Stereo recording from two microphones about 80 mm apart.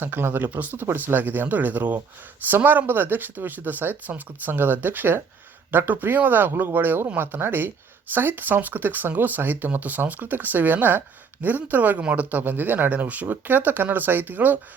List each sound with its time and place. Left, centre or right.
0.0 s speech: right